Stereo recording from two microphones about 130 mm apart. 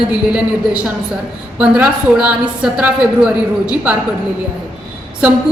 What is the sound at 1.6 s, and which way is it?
A woman's voice, 10° right (ahead or behind).